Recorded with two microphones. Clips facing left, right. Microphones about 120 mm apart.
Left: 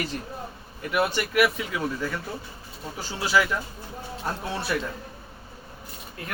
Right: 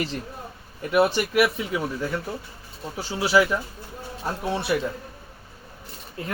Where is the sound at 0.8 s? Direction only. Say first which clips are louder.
Right 5 dB; 30° right (ahead or behind).